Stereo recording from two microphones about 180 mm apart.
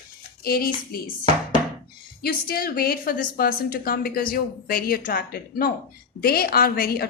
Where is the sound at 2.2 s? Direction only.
55° left (ahead or behind).